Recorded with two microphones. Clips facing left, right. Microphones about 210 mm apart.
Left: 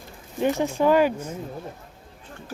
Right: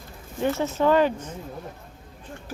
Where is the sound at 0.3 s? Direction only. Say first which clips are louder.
Left 2 dB; 15° left (ahead or behind).